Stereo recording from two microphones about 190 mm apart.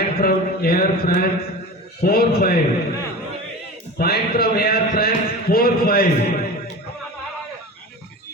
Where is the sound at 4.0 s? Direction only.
55° left (ahead or behind).